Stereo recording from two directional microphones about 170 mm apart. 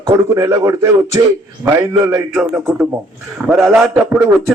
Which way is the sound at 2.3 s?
5° right (ahead or behind).